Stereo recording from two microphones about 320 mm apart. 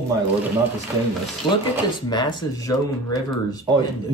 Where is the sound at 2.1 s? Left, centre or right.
Centre.